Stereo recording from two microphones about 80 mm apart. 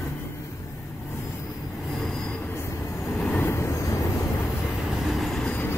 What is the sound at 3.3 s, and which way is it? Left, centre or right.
Vehicle, left.